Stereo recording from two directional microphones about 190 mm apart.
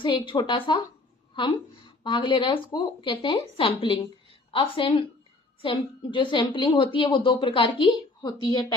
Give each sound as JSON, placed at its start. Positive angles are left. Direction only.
{"t": 0.0, "sound": "a woman's voice", "side_deg": 25}